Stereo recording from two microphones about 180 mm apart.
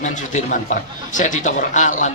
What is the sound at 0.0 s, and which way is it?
A man's voice, 45° left (ahead or behind).